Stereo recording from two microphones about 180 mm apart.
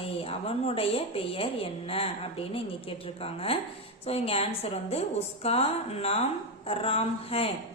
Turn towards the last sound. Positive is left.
turn(degrees=35)  # may be behind; listen again after turning